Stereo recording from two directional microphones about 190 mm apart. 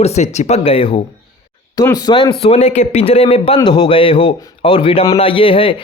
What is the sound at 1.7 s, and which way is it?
A man's voice, 15° left (ahead or behind).